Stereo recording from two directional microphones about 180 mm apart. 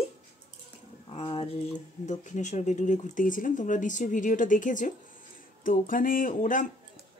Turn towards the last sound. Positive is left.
turn(degrees=45)  # may be behind; listen again after turning